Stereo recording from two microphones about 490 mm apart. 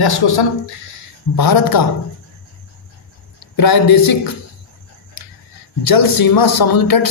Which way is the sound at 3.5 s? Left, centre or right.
Left.